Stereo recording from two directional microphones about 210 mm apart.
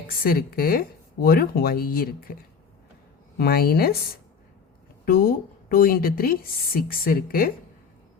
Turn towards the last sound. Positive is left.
turn(degrees=45)  # may be behind; listen again after turning